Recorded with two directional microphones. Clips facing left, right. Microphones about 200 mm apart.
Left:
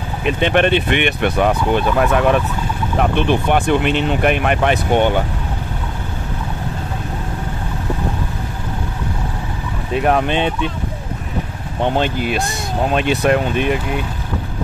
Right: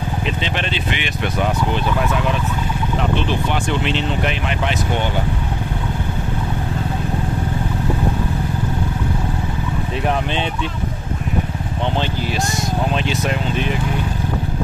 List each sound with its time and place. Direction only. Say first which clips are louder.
0.2 s speech: left 12 dB; 55° left (ahead or behind)
10.0 s speech: left 6 dB; 55° left (ahead or behind)
11.8 s speech: left 5 dB; 50° left (ahead or behind)